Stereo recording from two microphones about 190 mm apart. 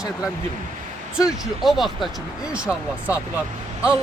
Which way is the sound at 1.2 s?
Centre (ahead or behind).